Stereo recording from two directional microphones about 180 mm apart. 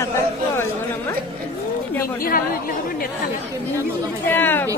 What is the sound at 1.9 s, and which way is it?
Speech, 15° left (ahead or behind).